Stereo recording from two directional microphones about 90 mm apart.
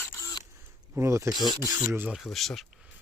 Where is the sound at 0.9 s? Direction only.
30° right (ahead or behind).